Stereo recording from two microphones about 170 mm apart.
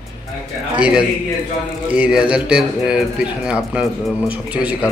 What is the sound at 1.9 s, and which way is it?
Speech, 5° right (ahead or behind).